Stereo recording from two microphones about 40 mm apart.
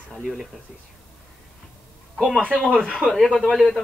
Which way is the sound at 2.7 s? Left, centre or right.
Right.